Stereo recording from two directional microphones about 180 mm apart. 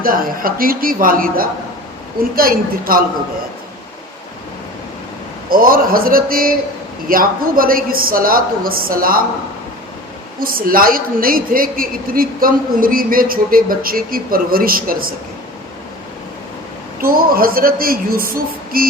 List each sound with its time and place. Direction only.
0.0 s a woman's voice: 50° right (ahead or behind)
5.5 s a woman's voice: 50° right (ahead or behind)
10.4 s a woman's voice: 55° right (ahead or behind)
17.0 s a woman's voice: 55° right (ahead or behind)